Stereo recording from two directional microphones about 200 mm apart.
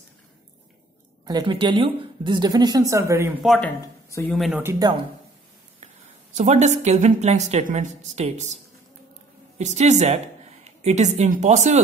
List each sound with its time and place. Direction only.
1.2 s a woman's voice: 20° right (ahead or behind)
3.4 s speech: 5° left (ahead or behind)
4.4 s speech: 5° right (ahead or behind)
6.3 s a woman's voice: 35° right (ahead or behind)
9.6 s a woman's voice: 35° right (ahead or behind)